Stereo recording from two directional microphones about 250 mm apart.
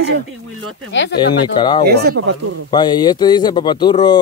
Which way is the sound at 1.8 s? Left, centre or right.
Right.